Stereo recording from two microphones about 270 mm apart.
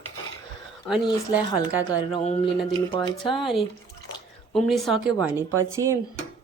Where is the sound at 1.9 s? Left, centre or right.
Centre.